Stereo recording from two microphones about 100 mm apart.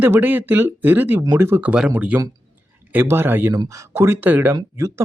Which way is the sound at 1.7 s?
10° right (ahead or behind).